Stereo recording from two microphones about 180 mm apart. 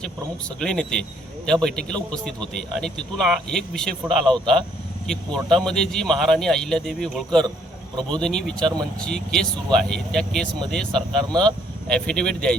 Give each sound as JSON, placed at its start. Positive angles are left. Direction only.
{"t": 0.6, "sound": "a man's voice", "side_deg": 5}
{"t": 8.1, "sound": "a man's voice", "side_deg": 5}
{"t": 8.6, "sound": "speech", "side_deg": -20}
{"t": 9.0, "sound": "a man's voice", "side_deg": 5}